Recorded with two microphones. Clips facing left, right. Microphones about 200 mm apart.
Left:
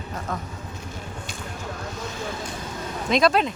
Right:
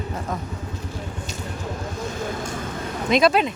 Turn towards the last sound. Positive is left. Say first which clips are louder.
# right 2 dB
turn(degrees=-5)  # may be behind; listen again after turning